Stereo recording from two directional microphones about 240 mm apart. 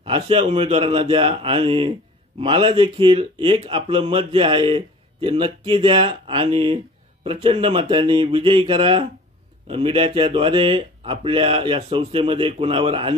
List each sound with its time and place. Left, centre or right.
0.0 s speech: right